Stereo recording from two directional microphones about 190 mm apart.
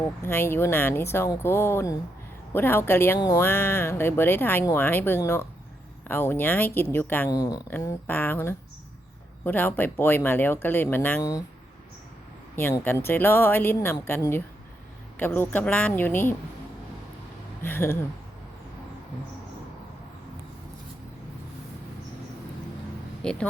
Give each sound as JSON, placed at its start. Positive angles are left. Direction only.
{"t": 0.0, "sound": "speech", "side_deg": 10}
{"t": 3.4, "sound": "speech", "side_deg": 10}
{"t": 12.5, "sound": "speech", "side_deg": 10}
{"t": 17.6, "sound": "speech", "side_deg": 10}
{"t": 23.2, "sound": "speech", "side_deg": 5}